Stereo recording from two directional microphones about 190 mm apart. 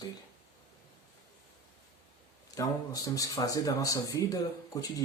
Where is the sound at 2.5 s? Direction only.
20° left (ahead or behind).